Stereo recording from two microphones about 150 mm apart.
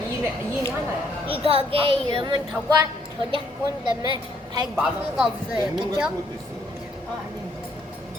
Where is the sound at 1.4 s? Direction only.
40° right (ahead or behind).